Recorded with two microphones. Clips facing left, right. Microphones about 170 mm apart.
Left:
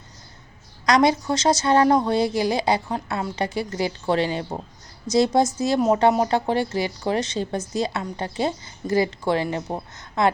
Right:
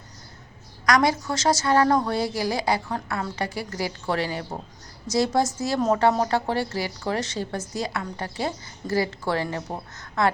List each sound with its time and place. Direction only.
0.9 s a woman's voice: 20° left (ahead or behind)